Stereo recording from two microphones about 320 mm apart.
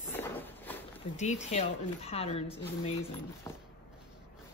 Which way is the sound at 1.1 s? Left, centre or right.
Left.